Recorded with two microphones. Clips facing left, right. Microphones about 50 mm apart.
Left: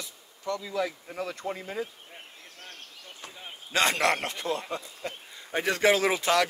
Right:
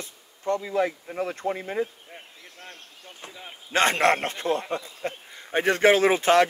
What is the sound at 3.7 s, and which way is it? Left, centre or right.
Speech, right.